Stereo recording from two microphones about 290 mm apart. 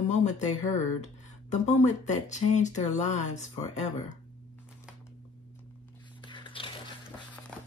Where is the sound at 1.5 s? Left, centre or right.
Left.